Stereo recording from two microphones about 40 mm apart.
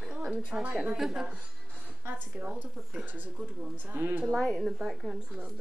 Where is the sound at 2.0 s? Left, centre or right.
Right.